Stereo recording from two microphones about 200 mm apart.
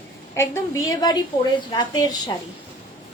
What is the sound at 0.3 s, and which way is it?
A woman's voice, 15° left (ahead or behind).